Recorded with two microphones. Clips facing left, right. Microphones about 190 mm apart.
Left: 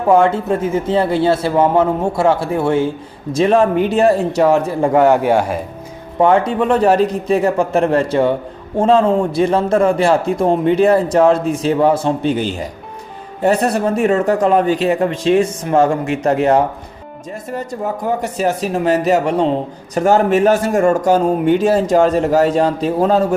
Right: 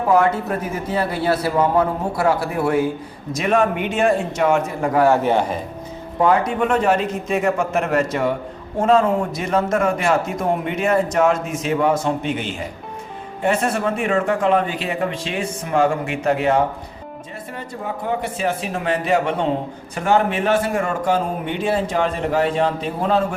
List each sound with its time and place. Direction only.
0.1 s a man's voice: 25° left (ahead or behind)
5.0 s a man's voice: 15° left (ahead or behind)
6.1 s a man's voice: 25° left (ahead or behind)